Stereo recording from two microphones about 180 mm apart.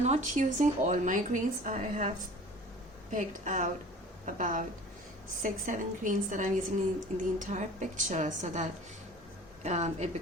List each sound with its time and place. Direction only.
0.0 s a woman's voice: 40° right (ahead or behind)
9.6 s a woman's voice: 40° right (ahead or behind)